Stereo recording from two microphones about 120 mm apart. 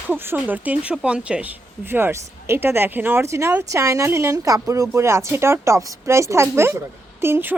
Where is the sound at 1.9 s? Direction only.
20° right (ahead or behind).